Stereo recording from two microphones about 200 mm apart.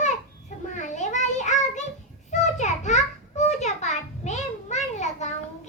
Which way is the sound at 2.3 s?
35° left (ahead or behind).